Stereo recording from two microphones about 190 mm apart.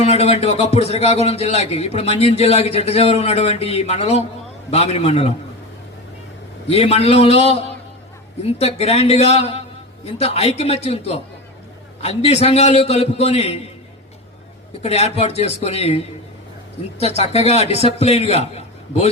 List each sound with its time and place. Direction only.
0.0 s a man's voice: 35° left (ahead or behind)
6.7 s a man's voice: 30° left (ahead or behind)
14.8 s a man's voice: 35° left (ahead or behind)